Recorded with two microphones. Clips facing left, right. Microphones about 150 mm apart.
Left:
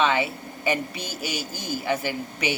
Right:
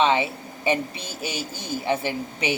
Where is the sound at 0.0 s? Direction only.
25° right (ahead or behind).